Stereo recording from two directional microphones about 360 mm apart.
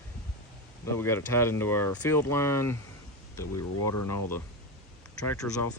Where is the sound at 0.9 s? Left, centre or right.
Centre.